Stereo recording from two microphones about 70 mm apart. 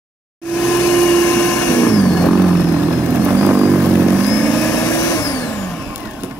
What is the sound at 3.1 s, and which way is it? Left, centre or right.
Vehicle, right.